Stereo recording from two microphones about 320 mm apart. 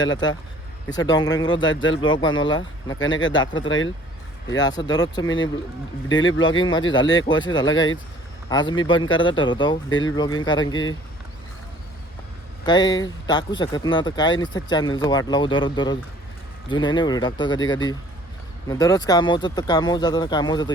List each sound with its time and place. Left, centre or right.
0.9 s speech: centre
1.6 s speech: left
2.0 s speech: centre
3.0 s speech: left
3.4 s speech: centre
3.7 s speech: left
4.6 s speech: centre
6.5 s speech: centre
7.0 s speech: left
7.3 s speech: centre
12.6 s speech: centre